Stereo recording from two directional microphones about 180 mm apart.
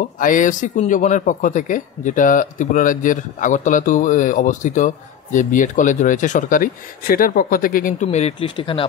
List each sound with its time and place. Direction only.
0.2 s speech: 45° left (ahead or behind); by 8.8 s 30° left (ahead or behind)